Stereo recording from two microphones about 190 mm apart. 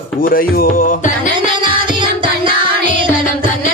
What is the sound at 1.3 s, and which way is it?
Music, 25° right (ahead or behind).